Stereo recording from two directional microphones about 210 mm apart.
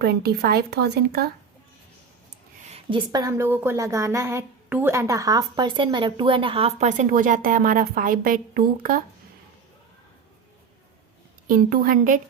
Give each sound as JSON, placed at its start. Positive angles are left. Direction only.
{"t": 0.0, "sound": "speech", "side_deg": -50}
{"t": 2.6, "sound": "a sound", "side_deg": -30}
{"t": 3.1, "sound": "a woman's voice", "side_deg": -15}
{"t": 11.4, "sound": "a woman's voice", "side_deg": -45}